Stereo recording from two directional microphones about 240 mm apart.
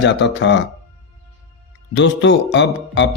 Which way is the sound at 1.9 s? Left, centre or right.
Left.